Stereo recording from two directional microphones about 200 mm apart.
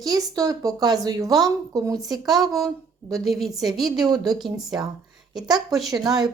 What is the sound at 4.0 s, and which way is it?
Speech, 20° right (ahead or behind).